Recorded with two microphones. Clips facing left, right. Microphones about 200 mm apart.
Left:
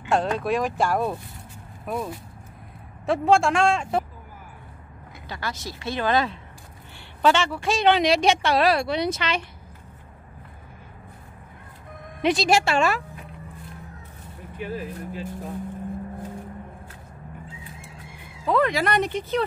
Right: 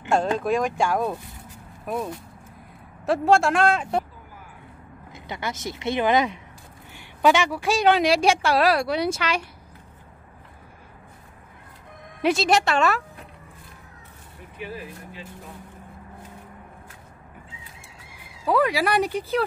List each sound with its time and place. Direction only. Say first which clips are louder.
0.1 s speech: right 1 dB; centre (ahead or behind)
5.1 s a woman's voice: right 2 dB; 20° right (ahead or behind)
12.2 s a woman's voice: even; 5° right (ahead or behind)
12.6 s speech: even; 5° left (ahead or behind)
14.6 s speech: left 4 dB; 45° left (ahead or behind)
18.4 s a woman's voice: even; 10° right (ahead or behind)